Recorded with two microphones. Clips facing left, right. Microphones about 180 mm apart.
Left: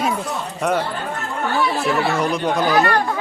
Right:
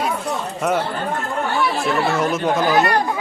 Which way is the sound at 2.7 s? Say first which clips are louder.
Left 1 dB; 20° right (ahead or behind).